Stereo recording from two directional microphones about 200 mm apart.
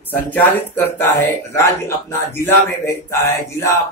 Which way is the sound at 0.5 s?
10° left (ahead or behind).